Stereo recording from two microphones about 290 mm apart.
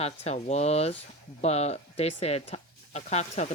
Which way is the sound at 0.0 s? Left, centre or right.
Left.